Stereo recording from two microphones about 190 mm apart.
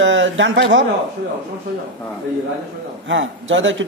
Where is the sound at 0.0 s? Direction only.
80° right.